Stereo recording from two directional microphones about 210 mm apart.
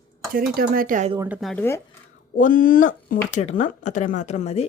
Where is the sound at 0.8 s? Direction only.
40° right (ahead or behind).